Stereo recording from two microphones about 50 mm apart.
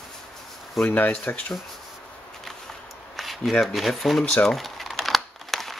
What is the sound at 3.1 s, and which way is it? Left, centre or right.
Speech, centre.